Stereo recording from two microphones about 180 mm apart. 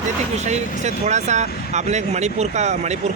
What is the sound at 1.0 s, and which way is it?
Speech, 40° right (ahead or behind).